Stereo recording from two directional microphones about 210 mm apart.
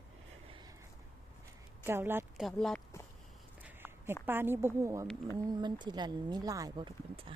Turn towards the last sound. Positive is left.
turn(degrees=-25)  # may be behind; listen again after turning